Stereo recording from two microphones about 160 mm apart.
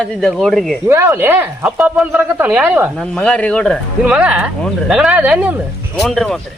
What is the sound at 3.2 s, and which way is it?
Speech, 5° left (ahead or behind).